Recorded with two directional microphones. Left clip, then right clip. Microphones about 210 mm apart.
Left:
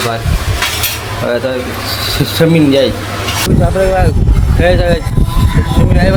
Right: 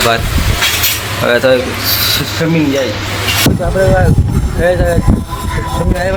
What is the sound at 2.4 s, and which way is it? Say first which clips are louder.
Speech: left 9 dB; 45° left (ahead or behind).